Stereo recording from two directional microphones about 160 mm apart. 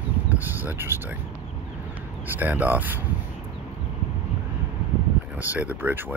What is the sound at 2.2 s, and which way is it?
Speech, 10° right (ahead or behind).